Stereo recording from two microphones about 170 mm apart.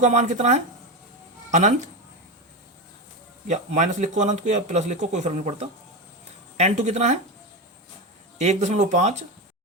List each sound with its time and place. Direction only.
0.0 s a man's voice: 45° right (ahead or behind)
3.4 s a man's voice: 45° right (ahead or behind)
8.4 s a man's voice: 40° right (ahead or behind)